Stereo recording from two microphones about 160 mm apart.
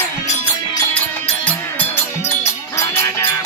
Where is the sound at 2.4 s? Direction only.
15° left (ahead or behind).